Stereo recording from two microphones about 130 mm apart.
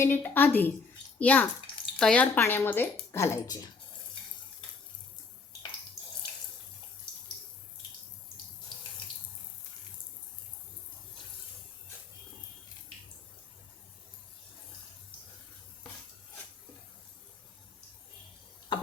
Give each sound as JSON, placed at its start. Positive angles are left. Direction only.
{"t": 0.0, "sound": "a woman's voice", "side_deg": 15}